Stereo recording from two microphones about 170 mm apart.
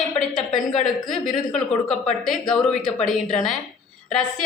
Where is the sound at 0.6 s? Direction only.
45° left (ahead or behind).